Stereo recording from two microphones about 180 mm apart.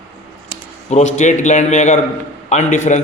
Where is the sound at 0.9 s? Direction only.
40° left (ahead or behind).